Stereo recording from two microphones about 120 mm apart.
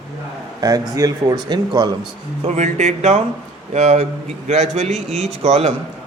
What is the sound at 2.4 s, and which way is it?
A man's voice, 70° right (ahead or behind).